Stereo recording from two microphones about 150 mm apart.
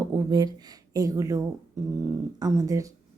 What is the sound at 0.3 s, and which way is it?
A woman's voice, 25° right (ahead or behind).